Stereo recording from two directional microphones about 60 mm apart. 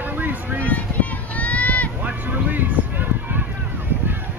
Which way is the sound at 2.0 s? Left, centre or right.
Right.